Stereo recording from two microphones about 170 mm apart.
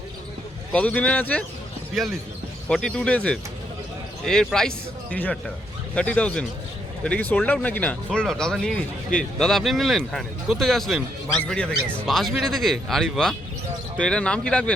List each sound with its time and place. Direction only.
0.7 s speech: 10° left (ahead or behind)
2.6 s speech: 5° left (ahead or behind)